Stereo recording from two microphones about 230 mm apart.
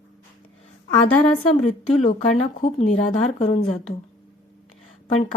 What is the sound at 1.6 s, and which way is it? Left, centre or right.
A woman's voice, left.